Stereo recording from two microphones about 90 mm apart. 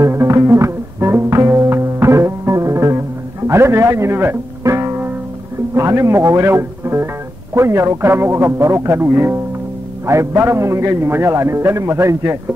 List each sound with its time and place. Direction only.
0.0 s music: 35° right (ahead or behind)
5.8 s a man's voice: 35° right (ahead or behind)